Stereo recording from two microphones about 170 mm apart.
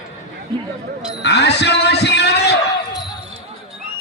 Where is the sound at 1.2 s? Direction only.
80° left.